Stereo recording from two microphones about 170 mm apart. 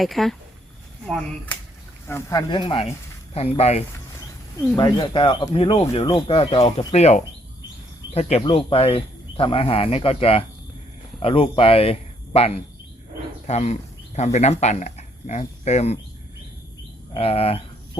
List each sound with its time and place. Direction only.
0.0 s speech: centre (ahead or behind)
2.0 s speech: 15° left (ahead or behind)
2.5 s speech: 30° left (ahead or behind)
4.8 s speech: 25° left (ahead or behind); by 16.0 s 40° left (ahead or behind)
17.2 s speech: 35° left (ahead or behind)